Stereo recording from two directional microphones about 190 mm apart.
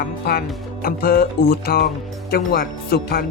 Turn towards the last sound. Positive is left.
turn(degrees=55)  # may be behind; listen again after turning